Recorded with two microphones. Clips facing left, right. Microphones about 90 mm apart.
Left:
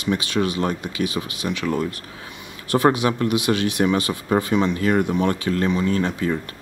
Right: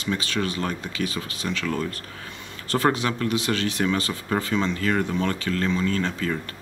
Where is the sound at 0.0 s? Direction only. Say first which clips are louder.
Left 4 dB; 15° left (ahead or behind).